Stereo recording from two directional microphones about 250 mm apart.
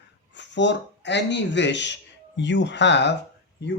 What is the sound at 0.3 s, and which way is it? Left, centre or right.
Speech, left.